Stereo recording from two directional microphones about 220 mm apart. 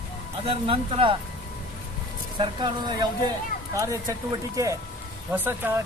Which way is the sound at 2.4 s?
20° right (ahead or behind).